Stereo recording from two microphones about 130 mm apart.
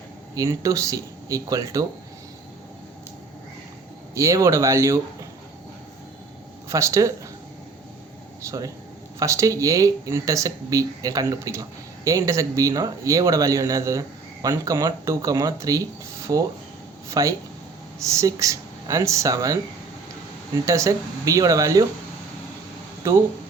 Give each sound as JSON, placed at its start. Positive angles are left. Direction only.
{"t": 0.3, "sound": "speech", "side_deg": -25}
{"t": 4.1, "sound": "speech", "side_deg": -25}
{"t": 6.7, "sound": "speech", "side_deg": -25}
{"t": 8.4, "sound": "speech", "side_deg": -25}
{"t": 20.7, "sound": "speech", "side_deg": -25}